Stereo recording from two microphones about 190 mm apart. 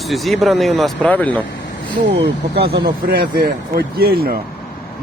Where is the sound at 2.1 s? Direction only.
65° right (ahead or behind).